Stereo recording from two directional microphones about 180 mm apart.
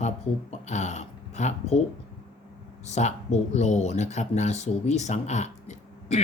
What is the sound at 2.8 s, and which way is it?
Speech, 40° left (ahead or behind).